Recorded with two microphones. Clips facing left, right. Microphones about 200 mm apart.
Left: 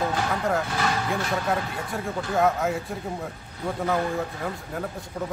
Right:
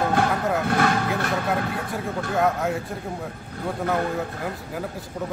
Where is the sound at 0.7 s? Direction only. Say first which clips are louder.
Right 5 dB; 55° right (ahead or behind).